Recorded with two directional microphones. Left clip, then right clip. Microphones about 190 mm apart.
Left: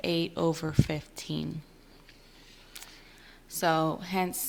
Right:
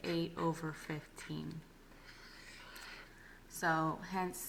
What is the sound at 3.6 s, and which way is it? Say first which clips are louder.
Speech: left 8 dB; 45° left (ahead or behind).